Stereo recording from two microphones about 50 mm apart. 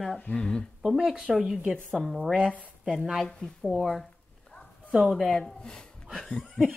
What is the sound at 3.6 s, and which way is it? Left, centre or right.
A woman's voice, centre.